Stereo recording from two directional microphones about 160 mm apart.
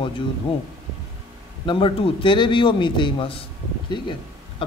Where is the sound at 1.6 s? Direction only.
30° left (ahead or behind).